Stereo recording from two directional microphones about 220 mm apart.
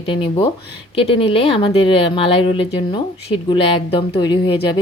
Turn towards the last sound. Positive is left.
turn(degrees=20)  # may be behind; listen again after turning